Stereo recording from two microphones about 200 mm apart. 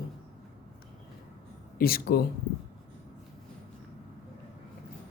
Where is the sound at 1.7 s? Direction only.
50° left (ahead or behind).